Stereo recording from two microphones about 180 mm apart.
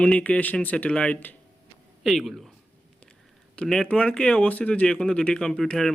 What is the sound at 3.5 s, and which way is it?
A man's voice, 5° left (ahead or behind).